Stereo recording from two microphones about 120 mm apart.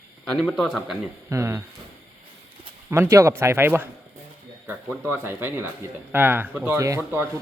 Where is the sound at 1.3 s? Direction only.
25° right (ahead or behind).